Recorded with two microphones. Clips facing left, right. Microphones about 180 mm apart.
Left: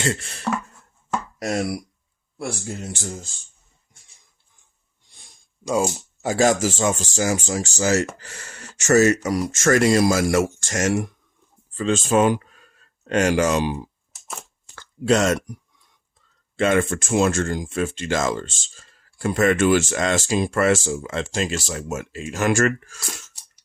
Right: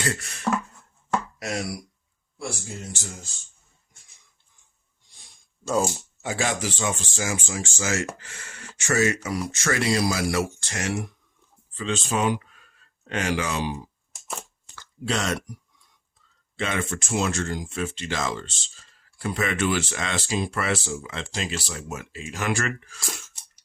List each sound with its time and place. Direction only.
0.0 s beatboxing: 25° left (ahead or behind)
1.4 s speech: 45° left (ahead or behind)
5.6 s speech: 15° left (ahead or behind)
6.2 s speech: 40° left (ahead or behind)
14.8 s a sound: 45° left (ahead or behind)
16.6 s speech: 50° left (ahead or behind)